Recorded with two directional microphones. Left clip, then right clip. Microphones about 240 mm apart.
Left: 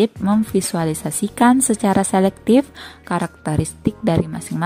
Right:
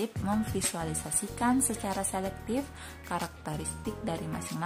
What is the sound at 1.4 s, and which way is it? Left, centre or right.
A woman's voice, left.